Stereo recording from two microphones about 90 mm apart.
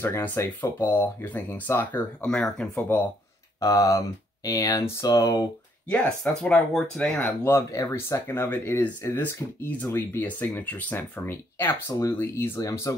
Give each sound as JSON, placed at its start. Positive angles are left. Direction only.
{"t": 0.0, "sound": "speech", "side_deg": 25}
{"t": 2.2, "sound": "speech", "side_deg": 5}
{"t": 3.5, "sound": "speech", "side_deg": 35}
{"t": 5.9, "sound": "speech", "side_deg": 15}
{"t": 7.4, "sound": "speech", "side_deg": 30}